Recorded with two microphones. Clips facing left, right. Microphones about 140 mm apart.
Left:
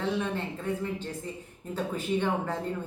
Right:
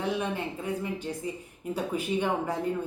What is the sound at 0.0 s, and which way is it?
Speech, 15° right (ahead or behind).